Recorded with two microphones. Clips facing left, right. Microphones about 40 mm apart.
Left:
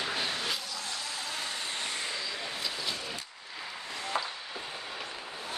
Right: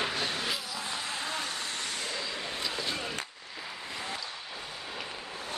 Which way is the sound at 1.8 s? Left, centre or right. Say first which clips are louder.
Left 1 dB; centre.